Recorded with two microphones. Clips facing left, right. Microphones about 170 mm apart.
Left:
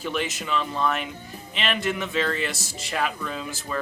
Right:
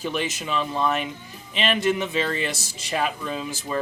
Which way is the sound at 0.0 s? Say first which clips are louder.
Right 1 dB; 25° right (ahead or behind).